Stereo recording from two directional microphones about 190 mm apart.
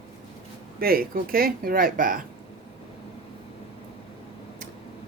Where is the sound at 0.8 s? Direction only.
50° right (ahead or behind).